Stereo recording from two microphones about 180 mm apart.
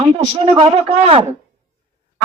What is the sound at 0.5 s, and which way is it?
Speech, 30° right (ahead or behind).